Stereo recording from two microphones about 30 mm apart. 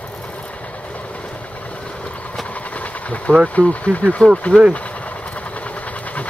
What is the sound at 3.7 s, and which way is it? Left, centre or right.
Speech, left.